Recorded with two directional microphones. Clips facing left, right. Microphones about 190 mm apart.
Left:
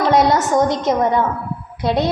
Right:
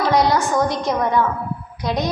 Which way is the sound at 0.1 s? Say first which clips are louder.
Left 3 dB; 25° left (ahead or behind).